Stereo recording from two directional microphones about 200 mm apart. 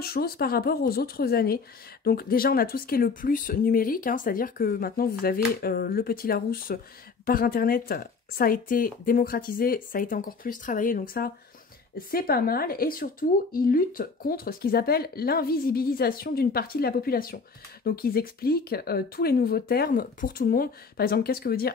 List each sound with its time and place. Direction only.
0.0 s speech: 50° left (ahead or behind)